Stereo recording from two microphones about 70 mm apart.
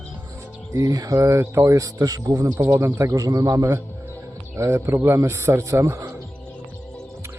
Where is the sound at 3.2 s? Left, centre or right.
Right.